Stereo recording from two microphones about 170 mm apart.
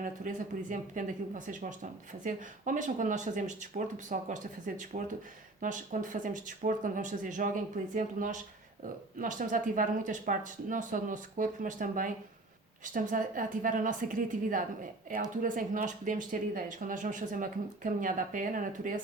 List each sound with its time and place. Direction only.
0.0 s speech: 50° right (ahead or behind)